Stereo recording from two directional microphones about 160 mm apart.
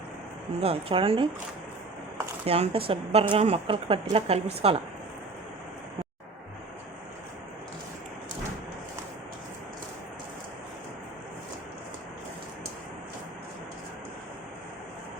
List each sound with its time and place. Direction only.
0.6 s a woman's voice: 35° right (ahead or behind)
2.5 s a woman's voice: 35° right (ahead or behind)